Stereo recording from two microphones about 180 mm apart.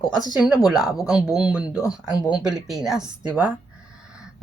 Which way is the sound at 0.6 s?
Centre (ahead or behind).